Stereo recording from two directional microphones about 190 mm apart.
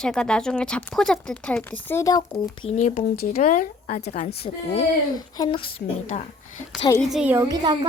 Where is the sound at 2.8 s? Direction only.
35° left (ahead or behind).